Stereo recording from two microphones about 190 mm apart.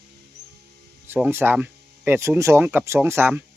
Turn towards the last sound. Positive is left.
turn(degrees=-10)  # may be behind; listen again after turning